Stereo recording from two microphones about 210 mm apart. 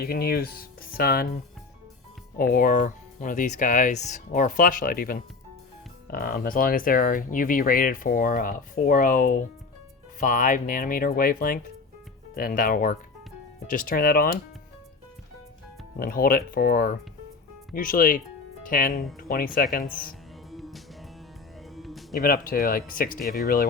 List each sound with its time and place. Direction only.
0.0 s speech: 45° left (ahead or behind)
2.4 s speech: 40° left (ahead or behind)
16.0 s speech: 45° left (ahead or behind)
20.5 s music: centre (ahead or behind)
22.2 s speech: 45° left (ahead or behind)